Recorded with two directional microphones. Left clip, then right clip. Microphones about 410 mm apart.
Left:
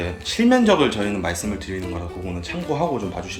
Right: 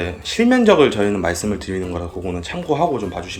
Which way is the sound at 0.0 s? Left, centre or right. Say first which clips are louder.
Right 3 dB; centre.